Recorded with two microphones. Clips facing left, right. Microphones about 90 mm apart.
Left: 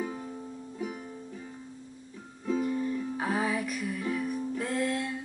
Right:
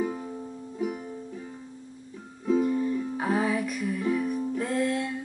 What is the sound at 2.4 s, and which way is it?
Music, 5° right (ahead or behind).